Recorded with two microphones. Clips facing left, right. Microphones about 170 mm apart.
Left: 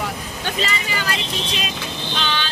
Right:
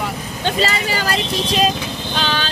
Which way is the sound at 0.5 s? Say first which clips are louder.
Right 6 dB; 40° right (ahead or behind).